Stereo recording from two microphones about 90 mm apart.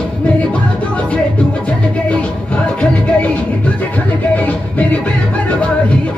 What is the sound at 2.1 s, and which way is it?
Music, 15° left (ahead or behind).